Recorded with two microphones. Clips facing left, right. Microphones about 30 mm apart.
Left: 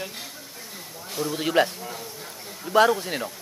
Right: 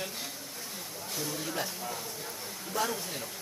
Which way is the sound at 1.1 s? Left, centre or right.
Left.